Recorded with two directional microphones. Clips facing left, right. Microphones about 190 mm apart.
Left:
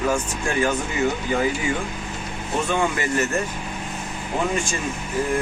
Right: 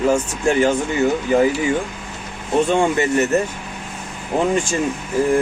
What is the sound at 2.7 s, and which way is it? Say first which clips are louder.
Speech: right 3 dB; 25° right (ahead or behind).